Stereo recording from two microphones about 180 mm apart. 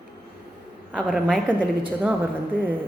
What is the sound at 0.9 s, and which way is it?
A woman's voice, 5° right (ahead or behind).